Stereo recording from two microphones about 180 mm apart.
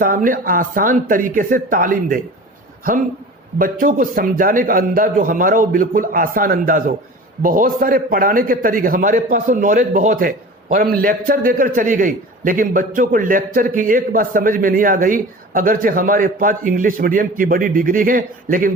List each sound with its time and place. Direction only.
0.0 s a man's voice: 50° right (ahead or behind)
3.6 s a man's voice: 50° right (ahead or behind)